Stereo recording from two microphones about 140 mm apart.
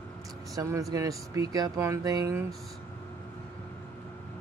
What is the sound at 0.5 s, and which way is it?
Speech, 20° right (ahead or behind).